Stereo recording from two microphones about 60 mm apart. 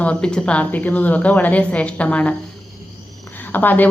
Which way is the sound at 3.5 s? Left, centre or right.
Left.